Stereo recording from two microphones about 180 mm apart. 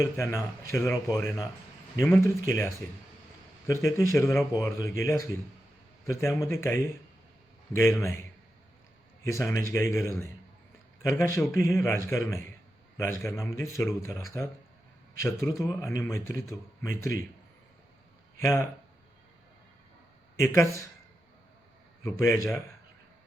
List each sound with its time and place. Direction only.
0.7 s speech: 15° left (ahead or behind)
3.7 s speech: 15° left (ahead or behind)
9.2 s speech: 15° left (ahead or behind)
18.3 s speech: 15° left (ahead or behind)
20.3 s speech: 15° left (ahead or behind)
22.0 s speech: 15° left (ahead or behind)